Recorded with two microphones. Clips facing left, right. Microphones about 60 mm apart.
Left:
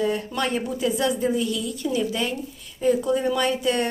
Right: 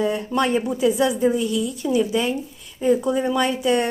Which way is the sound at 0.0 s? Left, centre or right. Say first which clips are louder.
Right 3 dB; right.